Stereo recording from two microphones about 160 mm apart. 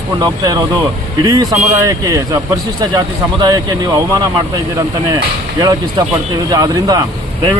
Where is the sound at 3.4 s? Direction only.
25° right (ahead or behind).